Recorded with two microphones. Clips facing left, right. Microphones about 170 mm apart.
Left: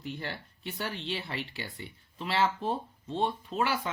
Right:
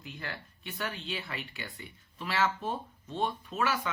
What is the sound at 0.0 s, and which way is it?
Speech, 30° left (ahead or behind).